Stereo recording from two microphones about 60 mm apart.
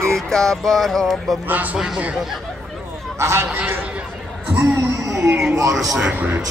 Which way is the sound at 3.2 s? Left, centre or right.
Right.